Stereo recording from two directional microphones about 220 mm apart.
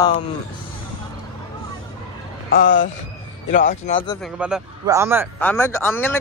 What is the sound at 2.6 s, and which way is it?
Speech, 40° left (ahead or behind).